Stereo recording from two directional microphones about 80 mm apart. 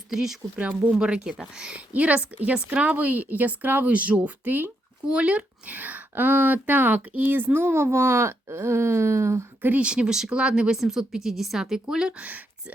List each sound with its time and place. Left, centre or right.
0.1 s speech: centre; by 9.5 s right
9.6 s speech: right
9.8 s speech: centre